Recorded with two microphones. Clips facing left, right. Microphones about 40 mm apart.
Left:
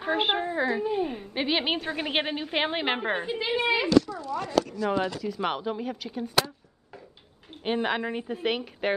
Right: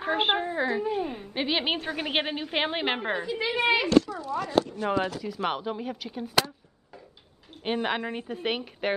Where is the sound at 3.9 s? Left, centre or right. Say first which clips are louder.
Even; right.